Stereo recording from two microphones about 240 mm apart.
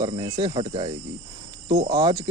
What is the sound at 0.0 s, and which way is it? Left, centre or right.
Speech, centre.